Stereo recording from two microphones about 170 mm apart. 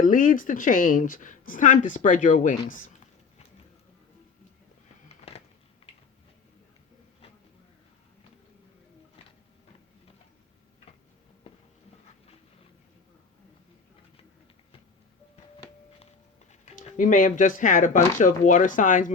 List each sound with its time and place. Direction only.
0.0 s a woman's voice: 50° left (ahead or behind)
5.0 s a sound: 35° left (ahead or behind)
16.5 s speech: 45° left (ahead or behind)